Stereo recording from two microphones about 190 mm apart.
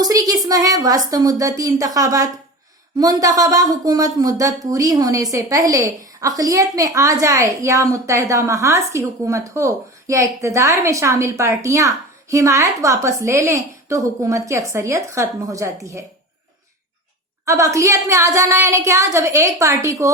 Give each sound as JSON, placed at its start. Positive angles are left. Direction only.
{"t": 0.0, "sound": "a sound", "side_deg": -20}
{"t": 0.4, "sound": "a woman's voice", "side_deg": -20}
{"t": 17.4, "sound": "speech", "side_deg": -15}